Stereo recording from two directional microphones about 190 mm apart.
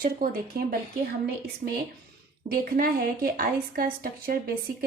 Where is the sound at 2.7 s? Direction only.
50° right (ahead or behind).